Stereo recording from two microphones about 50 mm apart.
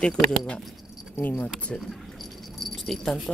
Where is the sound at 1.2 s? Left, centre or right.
Left.